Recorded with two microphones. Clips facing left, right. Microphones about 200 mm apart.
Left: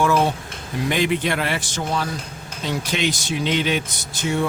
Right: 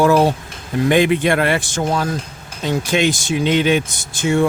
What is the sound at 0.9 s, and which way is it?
Speech, 55° right (ahead or behind).